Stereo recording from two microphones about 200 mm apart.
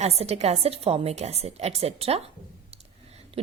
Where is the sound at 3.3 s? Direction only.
30° right (ahead or behind).